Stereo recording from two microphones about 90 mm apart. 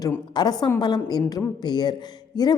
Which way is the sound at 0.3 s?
50° left (ahead or behind).